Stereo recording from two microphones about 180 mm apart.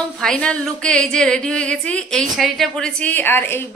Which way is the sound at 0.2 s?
5° left (ahead or behind).